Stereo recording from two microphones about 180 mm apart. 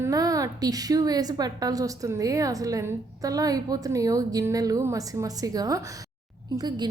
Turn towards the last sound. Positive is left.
turn(degrees=-25)  # may be behind; listen again after turning